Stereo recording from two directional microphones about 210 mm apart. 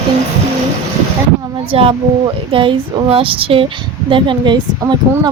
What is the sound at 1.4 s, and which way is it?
A woman's voice, 20° right (ahead or behind).